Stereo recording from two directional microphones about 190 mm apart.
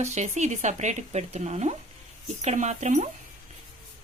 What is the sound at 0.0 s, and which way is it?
Speech, 40° right (ahead or behind).